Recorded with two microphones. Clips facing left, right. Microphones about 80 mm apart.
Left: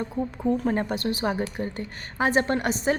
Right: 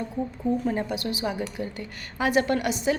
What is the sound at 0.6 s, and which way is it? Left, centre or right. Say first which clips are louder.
A woman's voice: left 2 dB; left.